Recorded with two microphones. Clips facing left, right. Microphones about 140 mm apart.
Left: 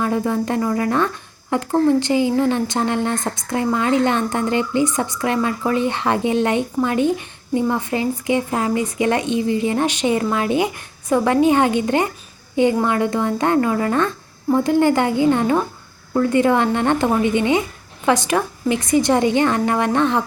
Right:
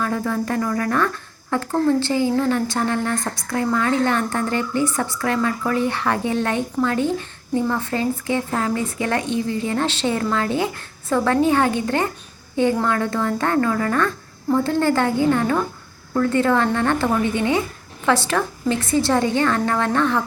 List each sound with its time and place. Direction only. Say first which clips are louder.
0.0 s a woman's voice: left 3 dB; 20° left (ahead or behind)